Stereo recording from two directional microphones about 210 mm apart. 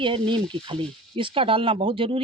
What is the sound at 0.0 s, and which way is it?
Speech, 25° right (ahead or behind).